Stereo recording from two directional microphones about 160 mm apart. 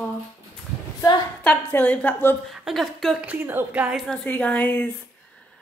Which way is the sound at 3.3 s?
10° right (ahead or behind).